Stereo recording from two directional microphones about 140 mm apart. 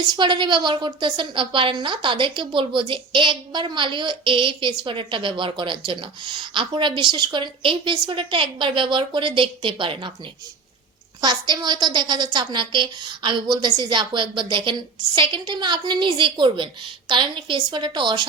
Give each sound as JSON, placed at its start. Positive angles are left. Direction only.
{"t": 0.1, "sound": "a woman's voice", "side_deg": -35}
{"t": 11.2, "sound": "a woman's voice", "side_deg": -30}